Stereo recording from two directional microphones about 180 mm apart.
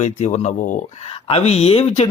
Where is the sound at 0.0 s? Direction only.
40° left (ahead or behind).